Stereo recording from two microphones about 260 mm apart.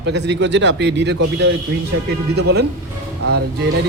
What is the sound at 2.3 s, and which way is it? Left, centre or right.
Speech, right.